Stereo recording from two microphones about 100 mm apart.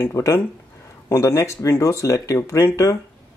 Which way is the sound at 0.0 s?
30° left (ahead or behind).